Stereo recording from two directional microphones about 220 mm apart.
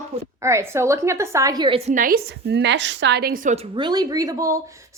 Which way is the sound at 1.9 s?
40° right (ahead or behind).